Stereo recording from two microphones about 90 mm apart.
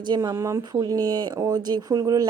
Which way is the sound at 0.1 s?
45° right (ahead or behind).